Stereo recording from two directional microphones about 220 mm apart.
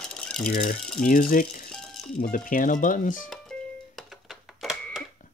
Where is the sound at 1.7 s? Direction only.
Centre (ahead or behind).